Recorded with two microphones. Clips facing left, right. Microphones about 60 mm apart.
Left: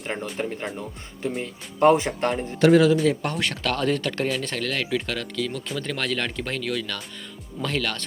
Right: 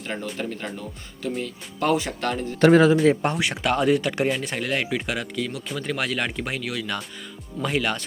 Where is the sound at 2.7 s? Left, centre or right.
Right.